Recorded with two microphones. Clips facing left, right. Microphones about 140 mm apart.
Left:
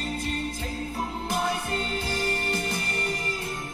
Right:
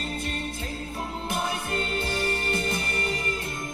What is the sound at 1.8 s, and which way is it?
Music, 60° right (ahead or behind).